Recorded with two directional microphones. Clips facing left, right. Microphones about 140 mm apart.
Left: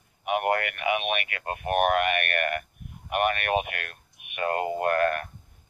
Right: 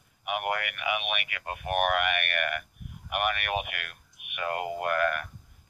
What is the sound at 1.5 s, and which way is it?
Speech, 30° left (ahead or behind).